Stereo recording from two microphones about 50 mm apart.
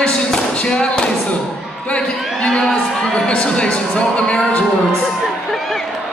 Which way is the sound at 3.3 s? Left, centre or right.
Left.